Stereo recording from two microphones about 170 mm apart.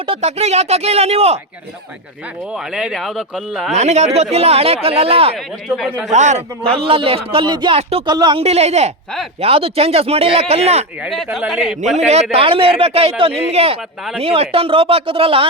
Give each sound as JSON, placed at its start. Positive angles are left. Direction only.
{"t": 0.0, "sound": "speech", "side_deg": -35}
{"t": 2.5, "sound": "speech", "side_deg": -5}
{"t": 3.7, "sound": "speech", "side_deg": -40}
{"t": 5.6, "sound": "speech", "side_deg": 0}
{"t": 6.1, "sound": "a man's voice", "side_deg": -45}
{"t": 6.7, "sound": "speech", "side_deg": -35}
{"t": 7.8, "sound": "speech", "side_deg": -35}
{"t": 8.0, "sound": "speech", "side_deg": -25}
{"t": 8.4, "sound": "speech", "side_deg": -40}
{"t": 11.0, "sound": "speech", "side_deg": 0}
{"t": 11.9, "sound": "speech", "side_deg": -40}